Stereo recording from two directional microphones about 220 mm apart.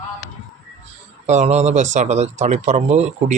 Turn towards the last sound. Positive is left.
turn(degrees=-30)  # may be behind; listen again after turning